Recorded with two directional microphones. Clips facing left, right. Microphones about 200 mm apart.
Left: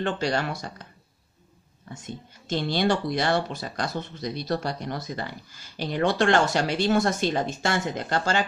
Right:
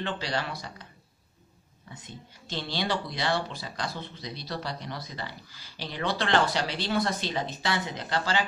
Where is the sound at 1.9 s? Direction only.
45° left (ahead or behind).